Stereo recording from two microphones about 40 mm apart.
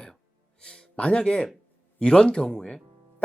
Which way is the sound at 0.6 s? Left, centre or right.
Left.